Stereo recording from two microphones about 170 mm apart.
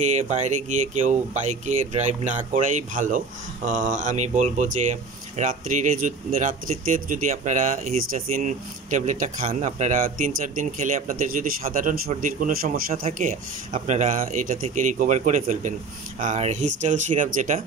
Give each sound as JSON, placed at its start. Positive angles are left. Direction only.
{"t": 0.0, "sound": "speech", "side_deg": -45}
{"t": 13.2, "sound": "speech", "side_deg": -45}